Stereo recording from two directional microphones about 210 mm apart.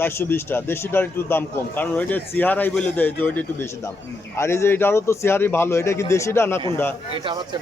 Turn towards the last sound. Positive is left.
turn(degrees=-20)  # may be behind; listen again after turning